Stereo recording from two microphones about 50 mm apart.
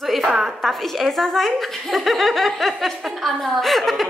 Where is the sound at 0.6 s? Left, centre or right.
Centre.